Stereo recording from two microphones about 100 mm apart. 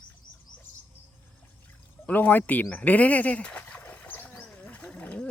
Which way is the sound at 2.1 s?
15° left (ahead or behind).